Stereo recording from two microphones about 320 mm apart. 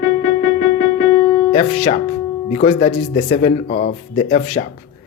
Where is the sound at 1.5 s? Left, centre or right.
Centre.